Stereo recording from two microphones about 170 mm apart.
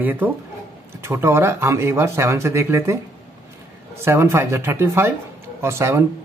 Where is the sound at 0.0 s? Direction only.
10° right (ahead or behind).